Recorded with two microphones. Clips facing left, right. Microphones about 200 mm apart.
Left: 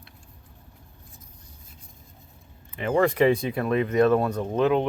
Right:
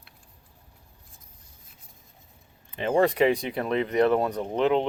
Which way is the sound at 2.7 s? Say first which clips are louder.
Even; 25° right (ahead or behind).